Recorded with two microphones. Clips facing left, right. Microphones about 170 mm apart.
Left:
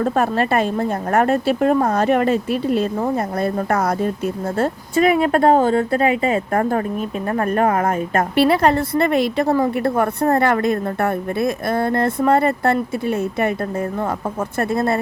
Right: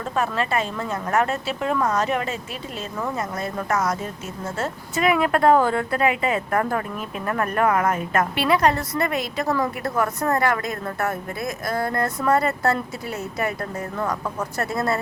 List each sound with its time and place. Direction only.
0.0 s speech: 55° left (ahead or behind)
4.5 s a woman's voice: 35° left (ahead or behind)